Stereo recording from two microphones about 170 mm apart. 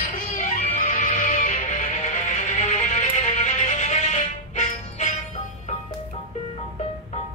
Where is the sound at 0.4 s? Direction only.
50° left (ahead or behind).